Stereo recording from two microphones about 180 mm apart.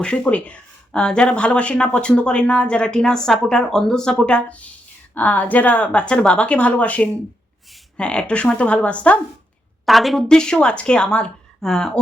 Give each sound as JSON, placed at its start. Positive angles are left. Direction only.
{"t": 0.0, "sound": "a woman's voice", "side_deg": 5}